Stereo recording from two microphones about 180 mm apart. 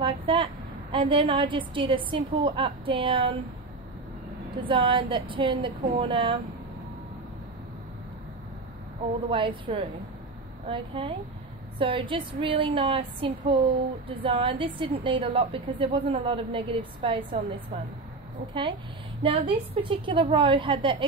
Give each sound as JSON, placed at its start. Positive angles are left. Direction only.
{"t": 0.0, "sound": "a woman's voice", "side_deg": -25}
{"t": 4.6, "sound": "a woman's voice", "side_deg": -30}
{"t": 9.3, "sound": "a woman's voice", "side_deg": -30}
{"t": 18.5, "sound": "a woman's voice", "side_deg": -25}